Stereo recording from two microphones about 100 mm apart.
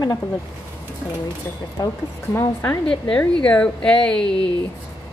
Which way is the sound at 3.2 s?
10° left (ahead or behind).